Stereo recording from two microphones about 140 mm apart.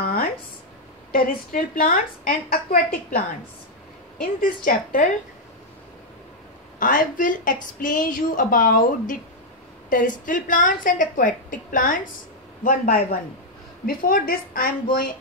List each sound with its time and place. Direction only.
0.0 s a sound: 90° left
1.1 s a woman's voice: 90° left
4.7 s a woman's voice: 80° left
6.8 s a woman's voice: 70° left (ahead or behind)
13.8 s a woman's voice: 90° left